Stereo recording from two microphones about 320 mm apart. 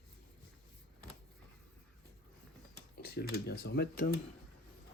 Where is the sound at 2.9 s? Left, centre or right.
Left.